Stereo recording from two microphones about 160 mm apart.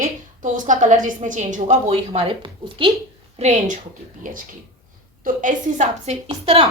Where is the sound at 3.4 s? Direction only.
45° right (ahead or behind).